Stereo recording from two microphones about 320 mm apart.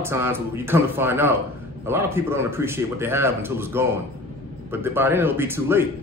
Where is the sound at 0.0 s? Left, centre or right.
Centre.